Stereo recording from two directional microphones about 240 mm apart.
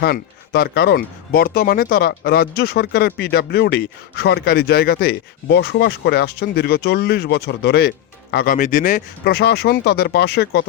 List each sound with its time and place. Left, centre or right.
0.0 s speech: left